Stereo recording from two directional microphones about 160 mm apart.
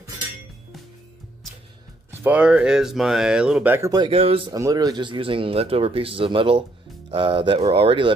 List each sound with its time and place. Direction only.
2.0 s speech: 10° right (ahead or behind)
3.9 s speech: 35° right (ahead or behind)
4.6 s speech: 20° right (ahead or behind)